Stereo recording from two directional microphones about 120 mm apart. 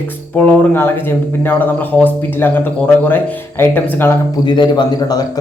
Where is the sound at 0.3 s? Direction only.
15° left (ahead or behind).